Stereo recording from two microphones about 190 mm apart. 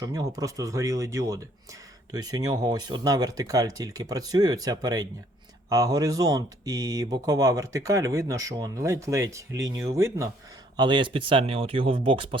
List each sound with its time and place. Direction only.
0.0 s speech: 20° right (ahead or behind)